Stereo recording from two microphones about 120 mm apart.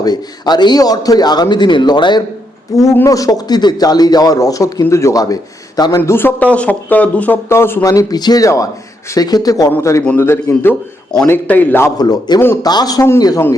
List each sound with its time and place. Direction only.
0.0 s a man's voice: 35° left (ahead or behind)
2.9 s a man's voice: 25° left (ahead or behind)
6.0 s a man's voice: 20° left (ahead or behind)
10.2 s a man's voice: 20° left (ahead or behind)
11.9 s a man's voice: 35° left (ahead or behind)